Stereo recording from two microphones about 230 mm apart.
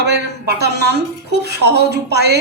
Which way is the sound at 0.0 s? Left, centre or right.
Right.